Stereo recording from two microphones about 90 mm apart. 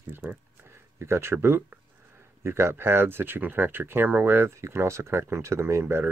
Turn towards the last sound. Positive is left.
turn(degrees=-25)  # may be behind; listen again after turning